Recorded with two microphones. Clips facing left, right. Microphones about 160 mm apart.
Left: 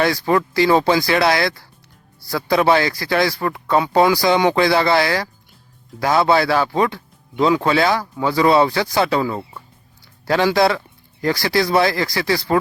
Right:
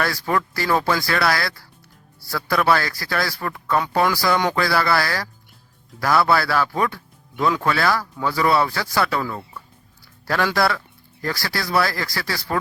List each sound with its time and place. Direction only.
0.0 s speech: 20° left (ahead or behind)